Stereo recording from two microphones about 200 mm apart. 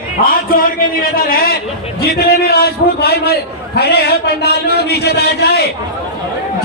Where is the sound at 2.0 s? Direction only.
50° left (ahead or behind).